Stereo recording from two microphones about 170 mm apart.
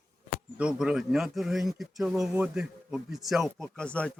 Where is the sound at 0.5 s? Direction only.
5° right (ahead or behind).